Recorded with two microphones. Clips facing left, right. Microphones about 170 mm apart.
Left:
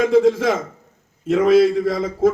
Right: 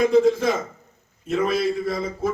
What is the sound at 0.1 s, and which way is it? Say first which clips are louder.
A man's voice: left 3 dB; 90° left.